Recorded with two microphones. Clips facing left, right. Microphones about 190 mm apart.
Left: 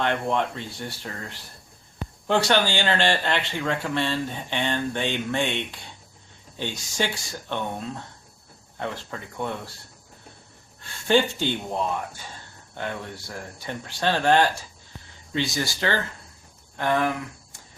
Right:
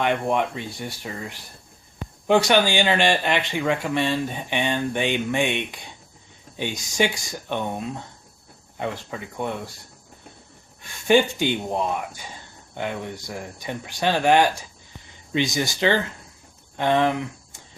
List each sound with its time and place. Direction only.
0.0 s speech: 15° right (ahead or behind)
10.8 s speech: 15° right (ahead or behind)